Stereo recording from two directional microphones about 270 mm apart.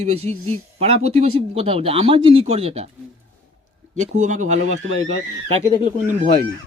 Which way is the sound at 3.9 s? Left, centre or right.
Right.